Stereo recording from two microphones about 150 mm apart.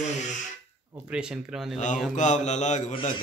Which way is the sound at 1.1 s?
5° right (ahead or behind).